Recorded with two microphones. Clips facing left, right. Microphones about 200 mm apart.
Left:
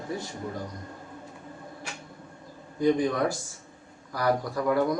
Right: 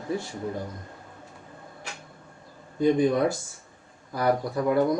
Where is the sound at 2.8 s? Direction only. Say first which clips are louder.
Right 3 dB; 25° right (ahead or behind).